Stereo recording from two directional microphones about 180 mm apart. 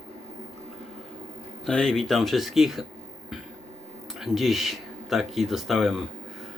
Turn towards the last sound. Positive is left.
turn(degrees=0)  # may be behind; listen again after turning